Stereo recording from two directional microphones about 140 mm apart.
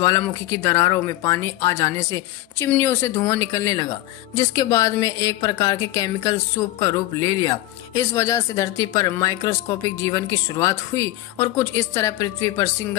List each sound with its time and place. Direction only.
0.0 s speech: 25° left (ahead or behind)